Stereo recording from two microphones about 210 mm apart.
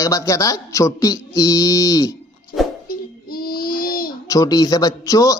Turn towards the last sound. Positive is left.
turn(degrees=15)  # may be behind; listen again after turning